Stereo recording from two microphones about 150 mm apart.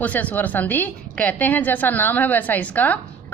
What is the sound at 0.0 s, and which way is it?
A woman's voice, 10° left (ahead or behind).